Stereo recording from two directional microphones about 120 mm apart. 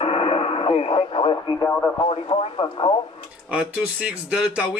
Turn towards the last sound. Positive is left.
turn(degrees=-5)  # may be behind; listen again after turning